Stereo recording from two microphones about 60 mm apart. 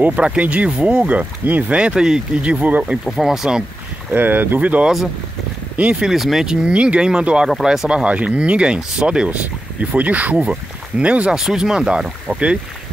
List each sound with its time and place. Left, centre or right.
0.2 s speech: centre
3.1 s speech: centre
4.1 s speech: right
4.8 s speech: centre
5.8 s speech: centre
6.0 s speech: centre
6.5 s speech: centre
8.0 s speech: right
11.3 s speech: centre